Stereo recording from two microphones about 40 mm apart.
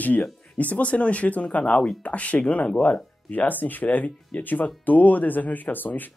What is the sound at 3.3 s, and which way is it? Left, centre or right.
Speech, left.